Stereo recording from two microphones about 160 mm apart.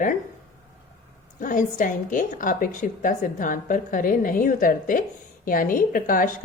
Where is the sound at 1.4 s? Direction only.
55° left (ahead or behind).